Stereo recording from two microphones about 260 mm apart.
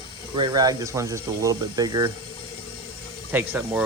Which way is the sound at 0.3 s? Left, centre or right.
Centre.